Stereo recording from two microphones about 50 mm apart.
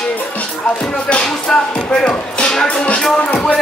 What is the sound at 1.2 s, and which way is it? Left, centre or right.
Speech, centre.